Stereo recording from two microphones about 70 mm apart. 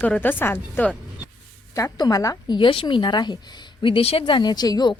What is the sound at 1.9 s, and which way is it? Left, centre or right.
Speech, left.